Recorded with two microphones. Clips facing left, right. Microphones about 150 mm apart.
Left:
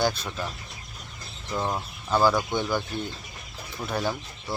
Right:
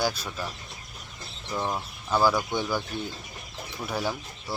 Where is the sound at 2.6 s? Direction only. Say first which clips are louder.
Left 2 dB; 10° right (ahead or behind).